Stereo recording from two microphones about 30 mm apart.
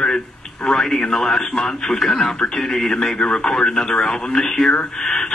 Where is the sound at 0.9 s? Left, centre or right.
Centre.